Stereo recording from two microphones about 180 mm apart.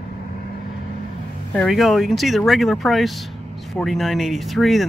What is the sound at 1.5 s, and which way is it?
Speech, centre (ahead or behind).